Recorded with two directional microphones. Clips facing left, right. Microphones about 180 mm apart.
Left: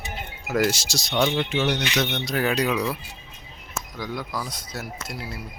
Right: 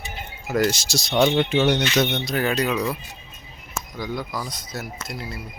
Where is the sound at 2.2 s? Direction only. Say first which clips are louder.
Right 1 dB; 5° left (ahead or behind).